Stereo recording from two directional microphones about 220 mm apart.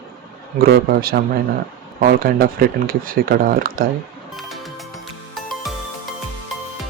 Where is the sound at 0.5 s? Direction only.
40° right (ahead or behind).